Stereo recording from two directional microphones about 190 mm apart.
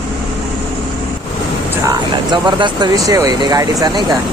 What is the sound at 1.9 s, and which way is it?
Speech, 25° right (ahead or behind).